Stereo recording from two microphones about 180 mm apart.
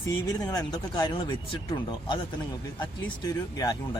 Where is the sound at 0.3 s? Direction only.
20° left (ahead or behind).